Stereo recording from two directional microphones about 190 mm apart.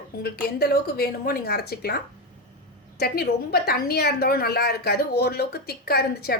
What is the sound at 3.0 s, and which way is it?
A woman's voice, 55° left (ahead or behind).